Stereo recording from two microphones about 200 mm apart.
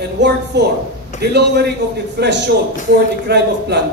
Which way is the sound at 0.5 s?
55° right (ahead or behind).